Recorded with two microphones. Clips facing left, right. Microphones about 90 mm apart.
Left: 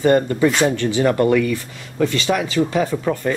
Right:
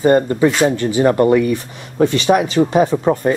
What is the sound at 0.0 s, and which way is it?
Speech, 30° right (ahead or behind).